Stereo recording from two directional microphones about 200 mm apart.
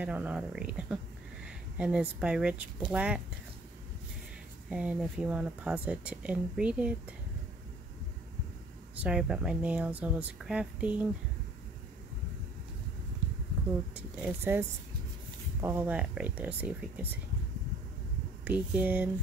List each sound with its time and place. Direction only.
0.0 s speech: 5° right (ahead or behind)
4.6 s speech: 5° right (ahead or behind)
9.0 s speech: 5° right (ahead or behind)
13.9 s speech: 10° right (ahead or behind)
18.4 s speech: 5° right (ahead or behind)